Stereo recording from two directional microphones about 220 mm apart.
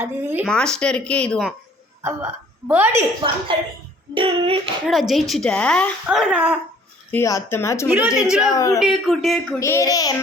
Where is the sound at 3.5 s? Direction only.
20° right (ahead or behind).